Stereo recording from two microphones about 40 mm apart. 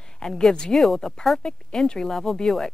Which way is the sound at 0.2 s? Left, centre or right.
Centre.